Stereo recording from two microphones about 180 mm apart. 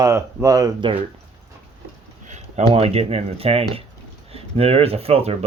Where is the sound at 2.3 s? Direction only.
35° right (ahead or behind).